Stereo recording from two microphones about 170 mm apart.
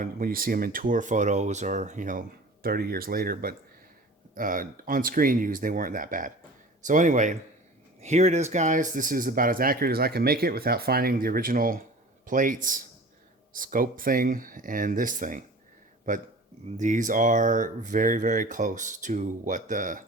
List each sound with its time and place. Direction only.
0.0 s speech: 55° right (ahead or behind)
2.6 s speech: 65° right (ahead or behind)